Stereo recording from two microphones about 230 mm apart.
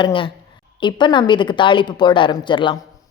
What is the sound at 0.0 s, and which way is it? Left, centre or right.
A woman's voice, left.